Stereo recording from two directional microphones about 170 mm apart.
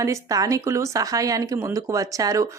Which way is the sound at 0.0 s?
20° right (ahead or behind).